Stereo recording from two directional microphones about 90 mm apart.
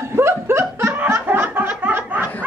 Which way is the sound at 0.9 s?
25° right (ahead or behind).